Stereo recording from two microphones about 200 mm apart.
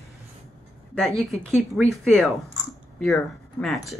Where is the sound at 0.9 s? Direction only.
Centre (ahead or behind).